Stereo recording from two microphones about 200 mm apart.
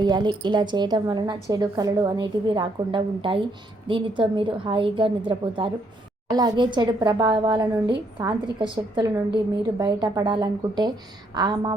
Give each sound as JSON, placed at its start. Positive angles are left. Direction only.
{"t": 0.0, "sound": "a woman's voice", "side_deg": -20}